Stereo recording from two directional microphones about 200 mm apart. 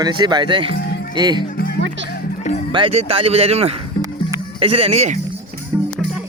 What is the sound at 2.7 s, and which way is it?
Speech, 25° right (ahead or behind).